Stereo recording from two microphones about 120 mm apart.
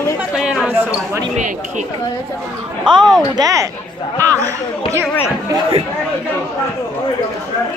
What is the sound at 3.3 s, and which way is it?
Speech, 30° right (ahead or behind).